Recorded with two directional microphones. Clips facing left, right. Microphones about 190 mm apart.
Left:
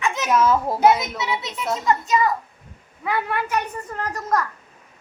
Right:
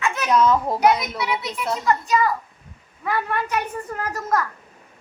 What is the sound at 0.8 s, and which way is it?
A woman's voice, 25° left (ahead or behind).